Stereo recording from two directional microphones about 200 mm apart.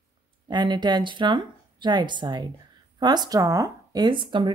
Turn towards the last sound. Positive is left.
turn(degrees=-25)  # may be behind; listen again after turning